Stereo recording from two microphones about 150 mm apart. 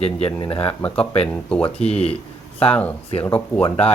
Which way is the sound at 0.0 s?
45° left (ahead or behind).